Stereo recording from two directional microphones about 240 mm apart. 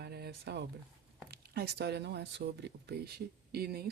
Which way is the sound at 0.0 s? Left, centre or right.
Right.